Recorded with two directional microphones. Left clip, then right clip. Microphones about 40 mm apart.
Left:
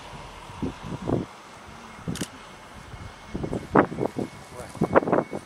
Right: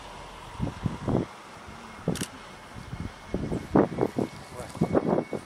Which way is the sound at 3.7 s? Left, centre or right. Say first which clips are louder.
Left 3 dB; left.